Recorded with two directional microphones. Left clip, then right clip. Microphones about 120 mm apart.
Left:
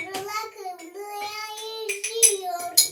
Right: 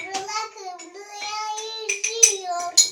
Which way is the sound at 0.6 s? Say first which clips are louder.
Left 1 dB; 45° right (ahead or behind).